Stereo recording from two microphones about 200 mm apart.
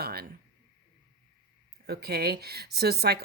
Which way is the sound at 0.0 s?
50° right (ahead or behind).